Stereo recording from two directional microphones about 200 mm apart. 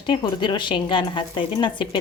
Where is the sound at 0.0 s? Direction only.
20° left (ahead or behind).